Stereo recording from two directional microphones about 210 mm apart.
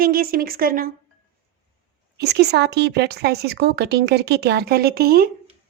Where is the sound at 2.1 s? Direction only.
50° right (ahead or behind).